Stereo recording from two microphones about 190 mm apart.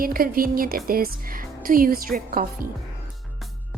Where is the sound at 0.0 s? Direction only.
50° right (ahead or behind).